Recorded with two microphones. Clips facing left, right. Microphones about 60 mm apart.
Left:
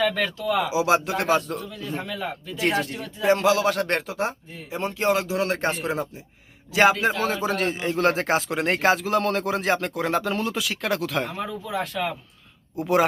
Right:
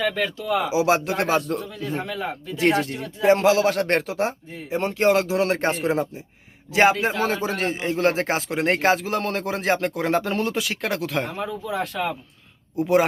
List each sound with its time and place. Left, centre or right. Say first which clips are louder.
0.0 s a man's voice: left 1 dB; centre; by 1.9 s right
1.9 s speech: right 2 dB; right
2.6 s a man's voice: right 3 dB; right
5.3 s speech: right 3 dB; right
5.5 s a man's voice: right 3 dB; right
12.8 s speech: right 2 dB; right